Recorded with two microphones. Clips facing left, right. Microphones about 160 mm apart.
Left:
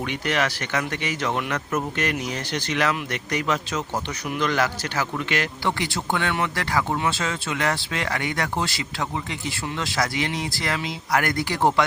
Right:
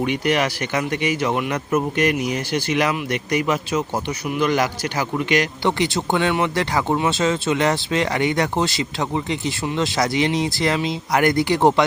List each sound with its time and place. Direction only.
0.0 s speech: 15° right (ahead or behind)